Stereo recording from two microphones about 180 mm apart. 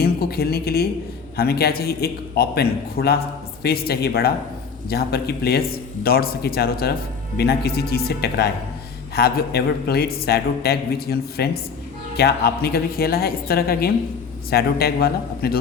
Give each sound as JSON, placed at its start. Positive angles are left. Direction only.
{"t": 0.0, "sound": "a man's voice", "side_deg": 60}